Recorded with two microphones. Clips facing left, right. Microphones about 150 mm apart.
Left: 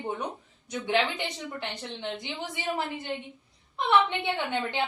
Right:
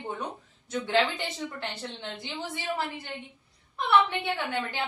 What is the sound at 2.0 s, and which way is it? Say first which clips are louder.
Speech: left 4 dB; 15° left (ahead or behind).